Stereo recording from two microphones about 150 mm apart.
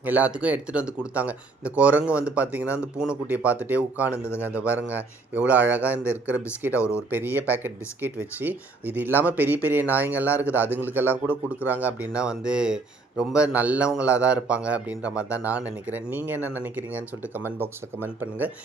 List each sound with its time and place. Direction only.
0.0 s speech: 10° right (ahead or behind)
4.1 s speech: 15° left (ahead or behind)
4.5 s speech: 10° right (ahead or behind)